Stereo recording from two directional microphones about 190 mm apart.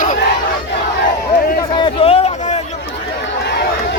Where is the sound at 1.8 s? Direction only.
30° left (ahead or behind).